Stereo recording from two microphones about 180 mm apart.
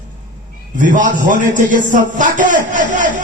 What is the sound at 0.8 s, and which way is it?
A man's voice, 45° right (ahead or behind).